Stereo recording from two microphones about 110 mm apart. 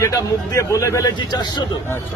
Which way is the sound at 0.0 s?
30° left (ahead or behind).